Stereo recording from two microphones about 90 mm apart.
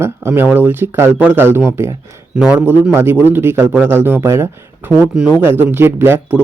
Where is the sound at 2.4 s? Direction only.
5° right (ahead or behind).